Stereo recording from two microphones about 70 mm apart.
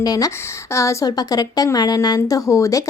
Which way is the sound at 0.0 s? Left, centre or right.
Left.